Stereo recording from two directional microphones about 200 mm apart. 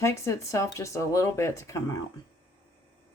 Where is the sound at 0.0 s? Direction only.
15° left (ahead or behind).